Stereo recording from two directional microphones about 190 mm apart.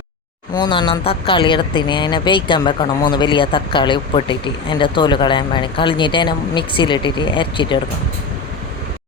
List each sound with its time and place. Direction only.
0.5 s speech: 20° left (ahead or behind)